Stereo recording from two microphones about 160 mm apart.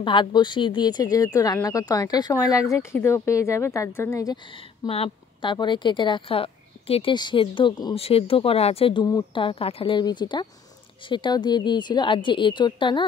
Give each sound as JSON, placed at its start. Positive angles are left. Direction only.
{"t": 0.0, "sound": "speech", "side_deg": 30}
{"t": 4.8, "sound": "a woman's voice", "side_deg": 35}